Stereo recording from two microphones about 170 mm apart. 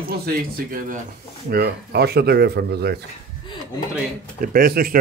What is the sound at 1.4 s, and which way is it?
Speech, 65° right (ahead or behind).